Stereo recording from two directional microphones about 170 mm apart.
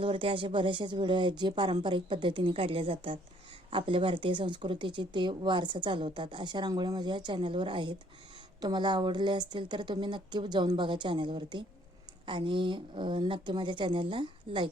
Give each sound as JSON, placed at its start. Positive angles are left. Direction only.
{"t": 0.0, "sound": "speech", "side_deg": -30}